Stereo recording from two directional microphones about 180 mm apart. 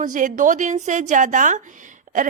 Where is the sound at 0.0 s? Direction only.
45° right (ahead or behind).